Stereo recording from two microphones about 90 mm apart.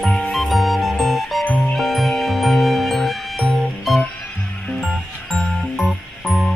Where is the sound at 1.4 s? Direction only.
15° left (ahead or behind).